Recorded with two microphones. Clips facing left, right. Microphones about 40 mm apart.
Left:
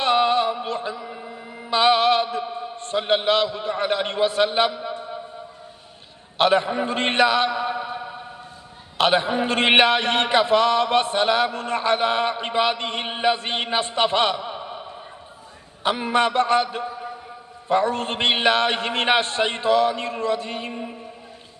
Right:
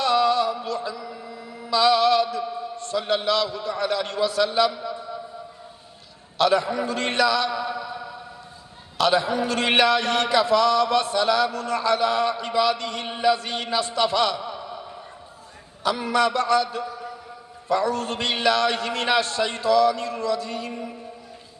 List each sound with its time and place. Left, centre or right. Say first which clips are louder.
0.0 s music: left 1 dB; left
6.3 s a man's voice: left 2 dB; left